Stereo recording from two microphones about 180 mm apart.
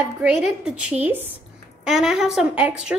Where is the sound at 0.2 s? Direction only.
5° right (ahead or behind).